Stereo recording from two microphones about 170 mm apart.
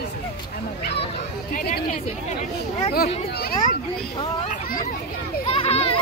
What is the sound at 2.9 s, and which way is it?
Speech, 65° left (ahead or behind).